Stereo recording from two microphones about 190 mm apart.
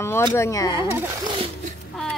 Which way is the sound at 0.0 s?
15° left (ahead or behind).